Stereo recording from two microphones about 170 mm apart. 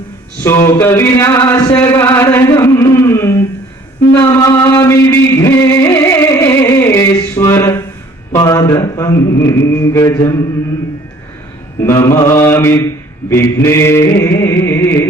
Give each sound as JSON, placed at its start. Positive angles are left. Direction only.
{"t": 0.7, "sound": "mantra", "side_deg": 15}
{"t": 2.6, "sound": "a sound", "side_deg": 15}
{"t": 4.1, "sound": "music", "side_deg": 15}
{"t": 8.3, "sound": "mantra", "side_deg": 20}
{"t": 11.9, "sound": "mantra", "side_deg": 15}
{"t": 13.3, "sound": "a sound", "side_deg": 15}